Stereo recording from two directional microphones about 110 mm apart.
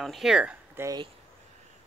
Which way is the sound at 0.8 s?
25° right (ahead or behind).